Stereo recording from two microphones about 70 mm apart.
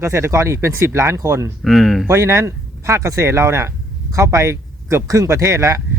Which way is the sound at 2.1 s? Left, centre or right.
Right.